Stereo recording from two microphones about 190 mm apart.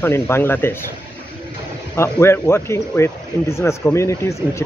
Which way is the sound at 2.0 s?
15° left (ahead or behind).